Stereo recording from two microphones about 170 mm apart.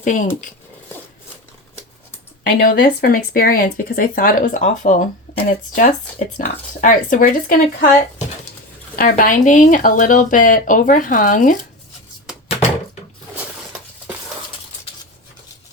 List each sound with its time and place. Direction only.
0.0 s speech: 50° left (ahead or behind)
2.4 s speech: 55° left (ahead or behind)